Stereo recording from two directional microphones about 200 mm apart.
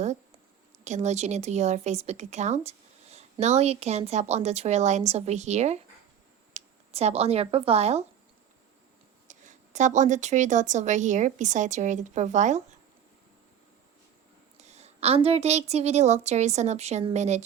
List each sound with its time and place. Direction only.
0.9 s a woman's voice: 35° right (ahead or behind)
9.2 s a woman's voice: 40° right (ahead or behind)
14.6 s a woman's voice: 35° right (ahead or behind)